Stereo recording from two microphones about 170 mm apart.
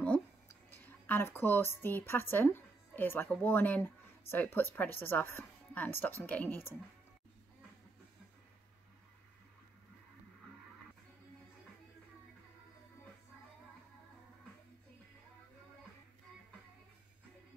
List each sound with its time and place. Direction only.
0.7 s a woman's voice: 10° left (ahead or behind)